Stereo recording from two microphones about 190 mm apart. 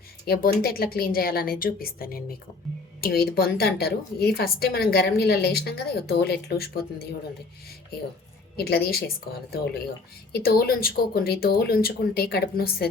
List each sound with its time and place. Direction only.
0.3 s a woman's voice: 50° left (ahead or behind)
8.5 s a woman's voice: 55° left (ahead or behind)